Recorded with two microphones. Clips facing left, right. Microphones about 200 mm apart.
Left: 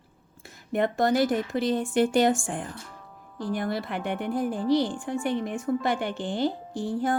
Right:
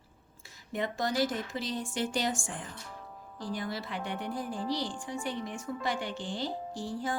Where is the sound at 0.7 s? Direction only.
55° left (ahead or behind).